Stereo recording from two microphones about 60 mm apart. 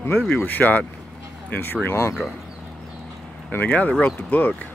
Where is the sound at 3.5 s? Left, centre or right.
Left.